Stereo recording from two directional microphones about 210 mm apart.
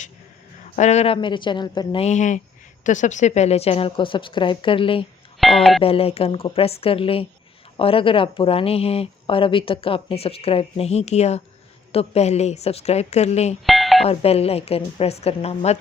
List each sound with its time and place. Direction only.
0.8 s speech: 30° left (ahead or behind)
5.4 s speech: centre (ahead or behind)
5.8 s a woman's voice: 25° left (ahead or behind)
13.7 s a sound: centre (ahead or behind)
14.0 s speech: 30° left (ahead or behind)